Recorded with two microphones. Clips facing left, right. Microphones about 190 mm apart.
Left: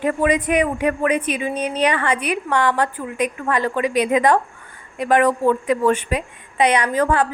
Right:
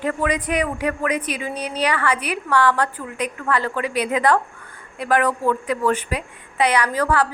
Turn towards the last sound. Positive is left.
turn(degrees=20)  # may be behind; listen again after turning